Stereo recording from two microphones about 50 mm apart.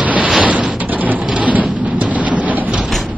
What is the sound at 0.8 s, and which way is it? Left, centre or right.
Rain, right.